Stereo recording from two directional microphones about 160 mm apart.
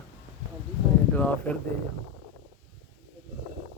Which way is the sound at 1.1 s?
10° left (ahead or behind).